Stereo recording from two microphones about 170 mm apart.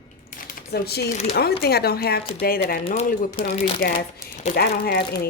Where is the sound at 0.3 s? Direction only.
55° left (ahead or behind); by 1.1 s 70° left (ahead or behind).